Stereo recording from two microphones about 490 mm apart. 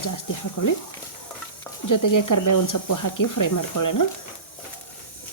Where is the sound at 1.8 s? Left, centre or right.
Left.